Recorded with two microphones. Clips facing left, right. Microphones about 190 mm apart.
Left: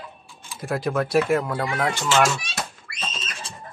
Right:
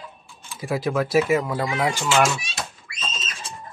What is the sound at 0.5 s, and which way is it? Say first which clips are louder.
Speech: right 1 dB; centre (ahead or behind).